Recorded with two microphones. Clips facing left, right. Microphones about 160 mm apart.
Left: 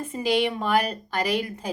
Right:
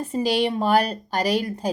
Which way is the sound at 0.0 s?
35° right (ahead or behind).